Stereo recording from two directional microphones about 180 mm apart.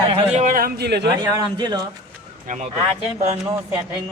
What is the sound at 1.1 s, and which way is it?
Speech, 25° right (ahead or behind).